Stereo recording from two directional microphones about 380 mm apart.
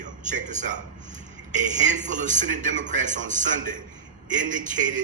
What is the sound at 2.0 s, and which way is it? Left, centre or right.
A man's voice, centre.